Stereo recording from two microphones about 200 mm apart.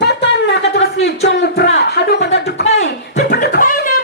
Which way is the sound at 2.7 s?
35° left (ahead or behind).